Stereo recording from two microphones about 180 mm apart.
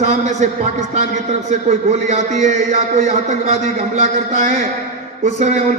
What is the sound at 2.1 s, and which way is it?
A man's voice, 40° right (ahead or behind).